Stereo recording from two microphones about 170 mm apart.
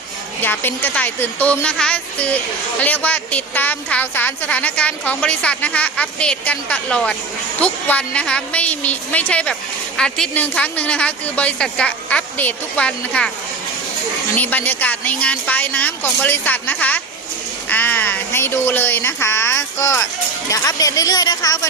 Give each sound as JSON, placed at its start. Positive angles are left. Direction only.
{"t": 0.4, "sound": "a woman's voice", "side_deg": 10}
{"t": 14.3, "sound": "a woman's voice", "side_deg": 10}